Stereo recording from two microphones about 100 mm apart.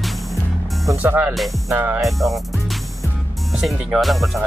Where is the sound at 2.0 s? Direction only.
Centre (ahead or behind).